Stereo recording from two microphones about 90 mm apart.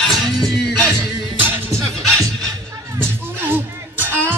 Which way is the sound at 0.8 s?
25° right (ahead or behind).